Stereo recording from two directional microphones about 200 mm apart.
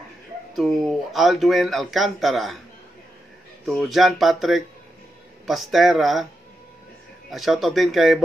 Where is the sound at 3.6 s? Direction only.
Centre (ahead or behind).